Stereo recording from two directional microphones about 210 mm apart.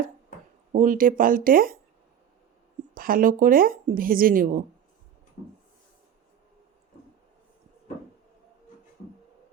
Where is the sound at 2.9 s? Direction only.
40° right (ahead or behind).